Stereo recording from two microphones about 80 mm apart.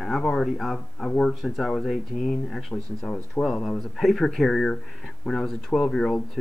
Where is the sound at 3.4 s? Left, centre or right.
Centre.